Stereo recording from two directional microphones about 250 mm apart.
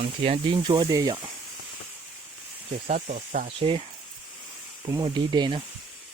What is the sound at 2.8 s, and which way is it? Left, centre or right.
Speech, right.